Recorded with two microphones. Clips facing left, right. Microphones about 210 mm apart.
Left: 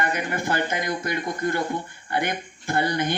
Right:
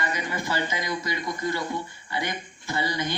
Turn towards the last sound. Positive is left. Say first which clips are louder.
# left 5 dB
turn(degrees=55)  # may be behind; listen again after turning